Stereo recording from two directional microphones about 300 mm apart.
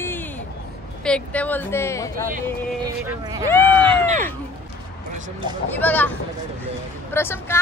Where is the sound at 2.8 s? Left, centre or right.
Centre.